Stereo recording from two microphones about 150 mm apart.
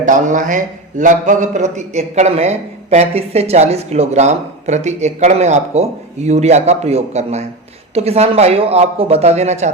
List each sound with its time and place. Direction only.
0.0 s a man's voice: 55° right (ahead or behind)